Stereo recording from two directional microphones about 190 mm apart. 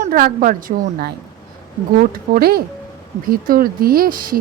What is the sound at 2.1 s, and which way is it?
Speech, 50° right (ahead or behind).